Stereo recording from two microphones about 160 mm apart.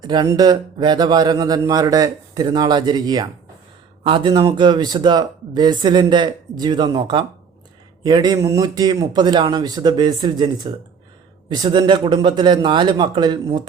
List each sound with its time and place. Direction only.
0.0 s speech: 25° right (ahead or behind)